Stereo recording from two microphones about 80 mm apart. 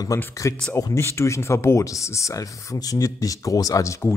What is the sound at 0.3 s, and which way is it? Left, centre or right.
A man's voice, left.